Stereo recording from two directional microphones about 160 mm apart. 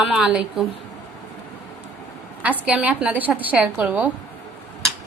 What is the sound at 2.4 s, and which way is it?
A woman's voice, 10° right (ahead or behind).